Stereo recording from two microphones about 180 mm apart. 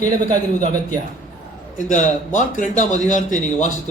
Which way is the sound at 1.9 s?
45° left (ahead or behind).